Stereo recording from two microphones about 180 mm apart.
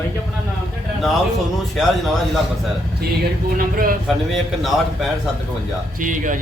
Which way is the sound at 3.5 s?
55° right (ahead or behind).